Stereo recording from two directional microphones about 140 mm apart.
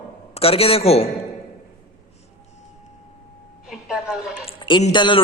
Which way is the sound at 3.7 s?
5° right (ahead or behind).